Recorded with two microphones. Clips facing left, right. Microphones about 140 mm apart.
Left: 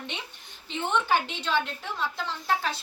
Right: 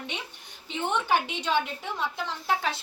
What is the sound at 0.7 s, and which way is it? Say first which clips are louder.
A woman's voice: even; 10° right (ahead or behind).